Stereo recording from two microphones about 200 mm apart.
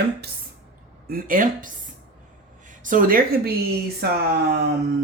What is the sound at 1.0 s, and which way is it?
Speech, 45° right (ahead or behind).